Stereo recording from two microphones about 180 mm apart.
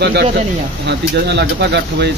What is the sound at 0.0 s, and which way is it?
Speech, 65° right (ahead or behind).